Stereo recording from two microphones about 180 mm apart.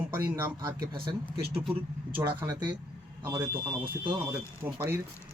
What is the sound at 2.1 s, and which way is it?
Speech, 10° right (ahead or behind).